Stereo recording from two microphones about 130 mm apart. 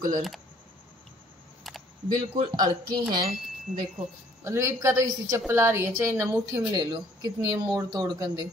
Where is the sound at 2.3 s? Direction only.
30° right (ahead or behind).